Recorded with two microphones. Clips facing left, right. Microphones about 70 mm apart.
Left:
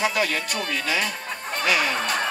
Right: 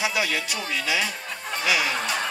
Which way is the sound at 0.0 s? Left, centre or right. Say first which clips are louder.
Left 2 dB; left.